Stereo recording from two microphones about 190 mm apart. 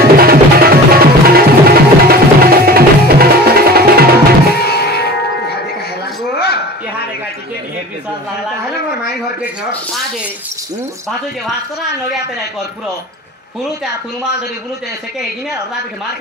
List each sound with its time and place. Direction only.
0.0 s music: 55° right (ahead or behind)
4.6 s music: 55° left (ahead or behind)
6.4 s a sound: 55° left (ahead or behind)